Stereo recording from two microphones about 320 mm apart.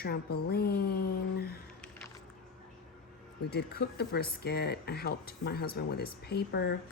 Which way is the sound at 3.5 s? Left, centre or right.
Left.